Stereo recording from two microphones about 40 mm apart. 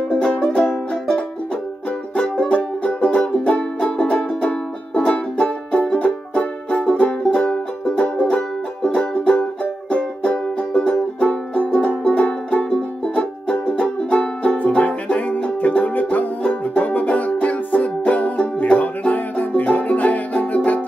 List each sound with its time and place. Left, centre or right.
0.5 s music: left
2.1 s music: left